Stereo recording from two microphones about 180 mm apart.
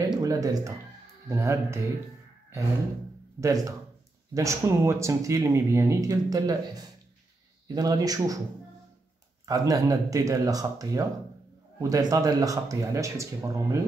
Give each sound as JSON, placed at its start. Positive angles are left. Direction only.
{"t": 0.2, "sound": "speech", "side_deg": -20}
{"t": 3.3, "sound": "speech", "side_deg": -15}
{"t": 9.5, "sound": "speech", "side_deg": -20}